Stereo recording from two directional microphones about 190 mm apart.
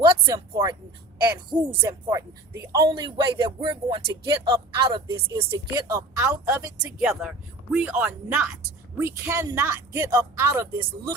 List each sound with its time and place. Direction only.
0.0 s speech: 25° right (ahead or behind)
1.8 s speech: 15° right (ahead or behind)
2.8 s speech: 25° right (ahead or behind)